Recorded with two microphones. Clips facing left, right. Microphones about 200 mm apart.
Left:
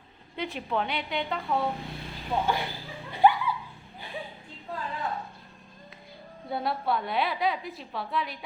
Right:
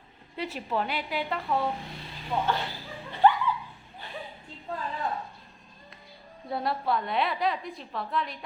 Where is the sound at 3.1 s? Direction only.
10° left (ahead or behind).